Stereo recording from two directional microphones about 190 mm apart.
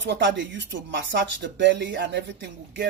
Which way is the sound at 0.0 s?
70° right (ahead or behind).